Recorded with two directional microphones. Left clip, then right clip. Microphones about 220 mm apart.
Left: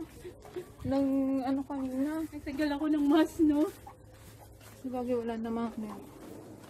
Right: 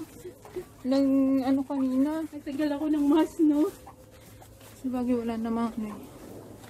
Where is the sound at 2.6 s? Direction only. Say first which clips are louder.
Right 3 dB; 20° left (ahead or behind).